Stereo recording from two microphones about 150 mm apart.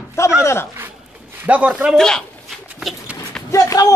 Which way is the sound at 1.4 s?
10° right (ahead or behind).